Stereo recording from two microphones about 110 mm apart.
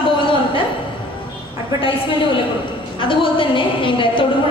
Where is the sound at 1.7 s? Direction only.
50° left (ahead or behind).